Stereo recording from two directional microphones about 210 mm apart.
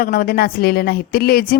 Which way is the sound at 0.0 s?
45° left (ahead or behind).